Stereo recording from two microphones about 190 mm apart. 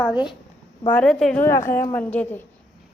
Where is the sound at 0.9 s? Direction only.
5° left (ahead or behind).